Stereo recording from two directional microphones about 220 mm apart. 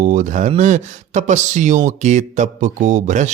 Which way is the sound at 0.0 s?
35° right (ahead or behind).